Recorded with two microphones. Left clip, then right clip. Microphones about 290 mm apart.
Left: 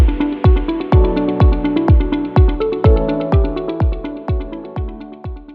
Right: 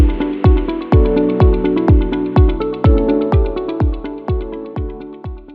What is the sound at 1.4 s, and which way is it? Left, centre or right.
Music, centre.